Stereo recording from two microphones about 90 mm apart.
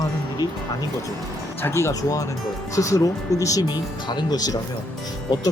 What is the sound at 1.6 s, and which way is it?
Speech, 30° left (ahead or behind).